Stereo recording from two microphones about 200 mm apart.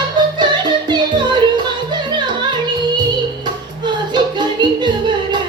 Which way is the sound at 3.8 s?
20° right (ahead or behind).